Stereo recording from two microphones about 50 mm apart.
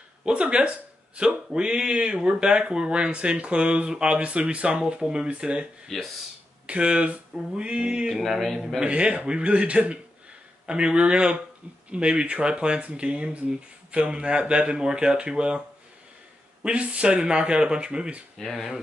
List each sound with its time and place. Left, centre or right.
0.2 s speech: right
5.9 s speech: centre
6.6 s speech: right
8.2 s speech: centre
8.8 s speech: right
16.6 s speech: right
18.4 s speech: centre